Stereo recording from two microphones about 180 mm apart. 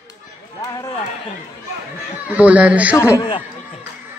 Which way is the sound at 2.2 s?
10° right (ahead or behind).